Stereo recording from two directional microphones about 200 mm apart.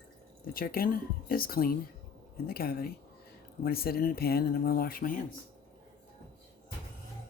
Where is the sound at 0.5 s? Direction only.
45° left (ahead or behind).